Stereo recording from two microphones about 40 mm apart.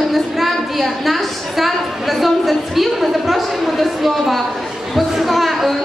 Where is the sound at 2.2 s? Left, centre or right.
Centre.